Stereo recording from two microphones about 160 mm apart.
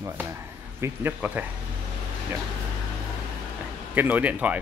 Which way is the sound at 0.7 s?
15° right (ahead or behind).